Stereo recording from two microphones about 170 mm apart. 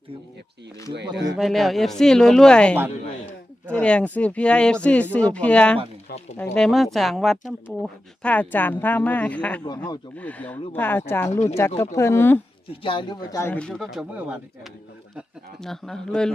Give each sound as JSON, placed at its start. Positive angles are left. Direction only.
{"t": 1.4, "sound": "speech", "side_deg": 0}
{"t": 12.7, "sound": "a man's voice", "side_deg": 30}
{"t": 13.4, "sound": "speech", "side_deg": 10}
{"t": 15.6, "sound": "speech", "side_deg": 5}